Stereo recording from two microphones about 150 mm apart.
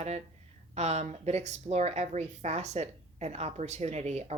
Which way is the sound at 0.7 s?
45° right (ahead or behind).